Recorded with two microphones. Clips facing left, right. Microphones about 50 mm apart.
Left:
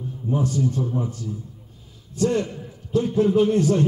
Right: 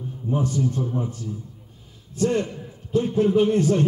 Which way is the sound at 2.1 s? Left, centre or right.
Right.